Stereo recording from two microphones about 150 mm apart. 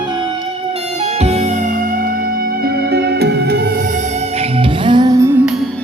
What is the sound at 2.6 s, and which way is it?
Music, 90° right.